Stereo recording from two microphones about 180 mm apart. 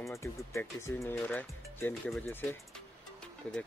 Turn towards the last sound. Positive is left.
turn(degrees=5)  # may be behind; listen again after turning